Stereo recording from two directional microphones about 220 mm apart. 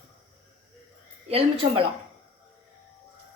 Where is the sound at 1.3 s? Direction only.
25° right (ahead or behind).